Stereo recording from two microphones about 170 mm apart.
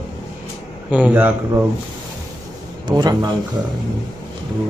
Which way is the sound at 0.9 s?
10° right (ahead or behind).